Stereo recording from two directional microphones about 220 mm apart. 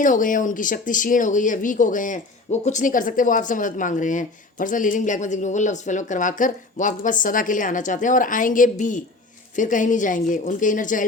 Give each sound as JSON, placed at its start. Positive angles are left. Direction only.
{"t": 0.0, "sound": "speech", "side_deg": 35}